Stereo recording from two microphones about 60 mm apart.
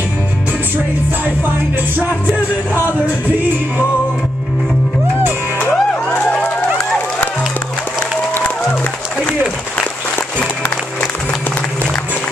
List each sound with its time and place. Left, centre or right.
5.7 s music: centre